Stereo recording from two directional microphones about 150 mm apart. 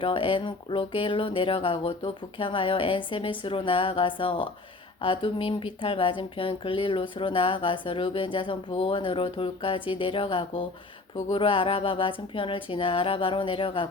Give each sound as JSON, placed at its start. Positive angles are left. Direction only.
{"t": 0.0, "sound": "speech", "side_deg": 35}